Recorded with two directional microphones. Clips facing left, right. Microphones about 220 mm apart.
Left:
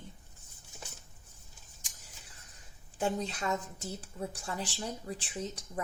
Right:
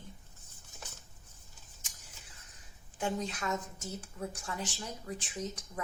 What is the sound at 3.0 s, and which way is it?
Speech, 35° left (ahead or behind).